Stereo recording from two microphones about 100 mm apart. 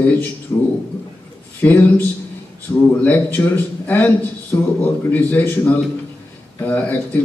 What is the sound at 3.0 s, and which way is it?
A man's voice, 15° left (ahead or behind).